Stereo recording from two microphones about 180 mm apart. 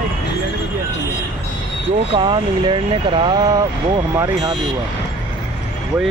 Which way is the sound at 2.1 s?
25° right (ahead or behind).